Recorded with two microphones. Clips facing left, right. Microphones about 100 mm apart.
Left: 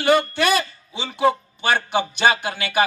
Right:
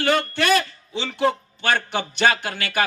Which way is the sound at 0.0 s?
15° left (ahead or behind).